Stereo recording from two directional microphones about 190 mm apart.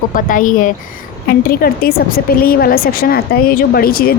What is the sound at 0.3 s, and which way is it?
A woman's voice, 45° left (ahead or behind).